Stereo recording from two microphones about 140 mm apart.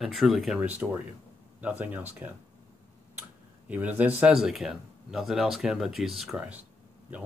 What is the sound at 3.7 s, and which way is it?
Speech, 10° right (ahead or behind).